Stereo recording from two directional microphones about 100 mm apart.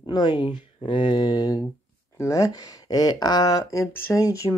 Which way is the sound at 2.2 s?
35° left (ahead or behind).